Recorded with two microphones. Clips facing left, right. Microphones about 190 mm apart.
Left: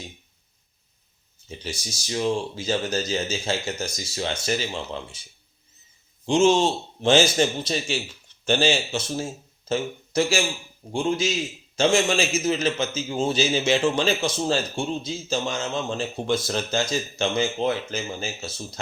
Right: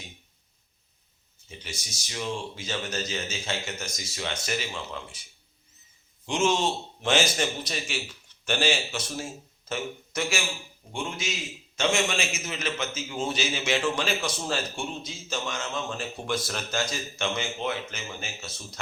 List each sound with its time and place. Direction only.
1.8 s speech: 35° left (ahead or behind)
6.2 s a man's voice: 30° left (ahead or behind)